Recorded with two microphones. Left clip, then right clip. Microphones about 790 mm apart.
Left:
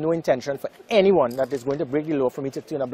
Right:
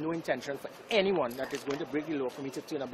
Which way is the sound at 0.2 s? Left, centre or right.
Left.